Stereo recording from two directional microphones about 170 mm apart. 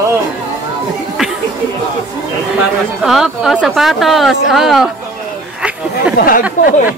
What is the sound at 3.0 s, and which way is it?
Speech, 5° right (ahead or behind).